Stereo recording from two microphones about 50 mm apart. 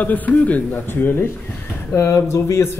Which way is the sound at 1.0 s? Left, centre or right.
Left.